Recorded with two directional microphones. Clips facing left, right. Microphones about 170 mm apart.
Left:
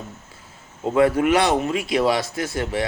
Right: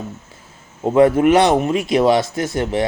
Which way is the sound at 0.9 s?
20° right (ahead or behind).